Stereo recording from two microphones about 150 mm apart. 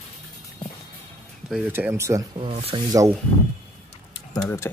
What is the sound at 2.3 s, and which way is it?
Speech, 40° right (ahead or behind).